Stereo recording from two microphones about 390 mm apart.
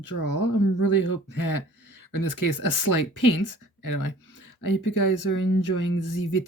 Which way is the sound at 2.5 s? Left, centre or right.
Left.